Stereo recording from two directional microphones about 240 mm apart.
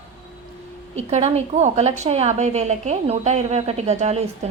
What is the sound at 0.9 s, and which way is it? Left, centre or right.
A woman's voice, right.